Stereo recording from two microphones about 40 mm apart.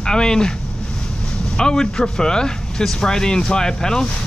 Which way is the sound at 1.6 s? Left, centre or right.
Centre.